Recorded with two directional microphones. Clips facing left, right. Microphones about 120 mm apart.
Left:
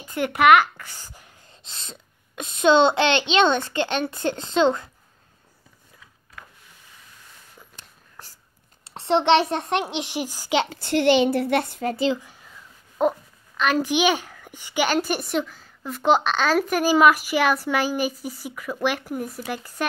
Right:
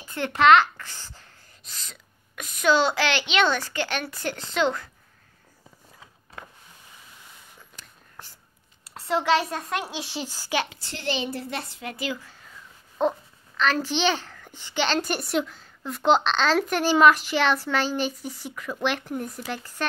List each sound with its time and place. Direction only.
0.1 s a child's voice: 15° left (ahead or behind)
1.6 s a child's voice: 25° left (ahead or behind)
6.4 s power windows: 25° right (ahead or behind)
8.8 s a child's voice: 25° left (ahead or behind)
10.7 s a woman's voice: 60° left (ahead or behind)
11.8 s speech: 30° left (ahead or behind)
13.0 s a child's voice: 10° left (ahead or behind)